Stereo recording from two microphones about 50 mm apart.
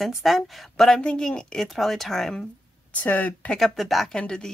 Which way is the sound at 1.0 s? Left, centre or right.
Centre.